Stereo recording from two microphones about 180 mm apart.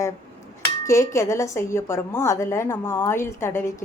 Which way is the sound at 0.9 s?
15° left (ahead or behind).